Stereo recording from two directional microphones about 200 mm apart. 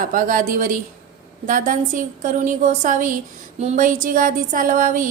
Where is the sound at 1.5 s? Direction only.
40° right (ahead or behind).